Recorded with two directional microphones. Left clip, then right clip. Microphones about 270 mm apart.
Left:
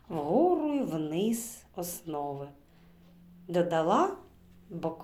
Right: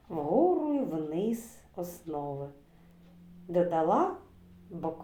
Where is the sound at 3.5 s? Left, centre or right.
Left.